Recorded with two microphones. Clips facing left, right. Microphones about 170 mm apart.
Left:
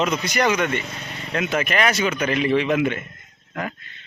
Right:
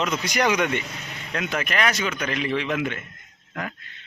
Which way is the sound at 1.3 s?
5° left (ahead or behind).